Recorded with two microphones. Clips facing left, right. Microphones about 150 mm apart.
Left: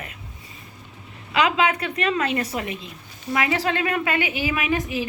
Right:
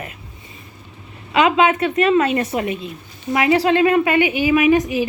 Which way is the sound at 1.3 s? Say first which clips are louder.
Right 5 dB; 25° right (ahead or behind).